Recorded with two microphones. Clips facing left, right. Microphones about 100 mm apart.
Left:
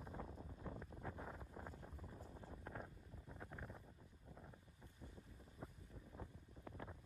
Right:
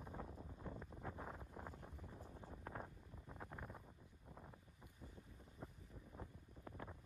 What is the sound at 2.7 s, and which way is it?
Wind noise, 25° right (ahead or behind).